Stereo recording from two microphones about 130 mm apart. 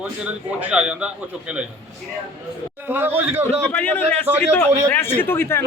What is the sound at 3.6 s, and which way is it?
A man's voice, 10° left (ahead or behind).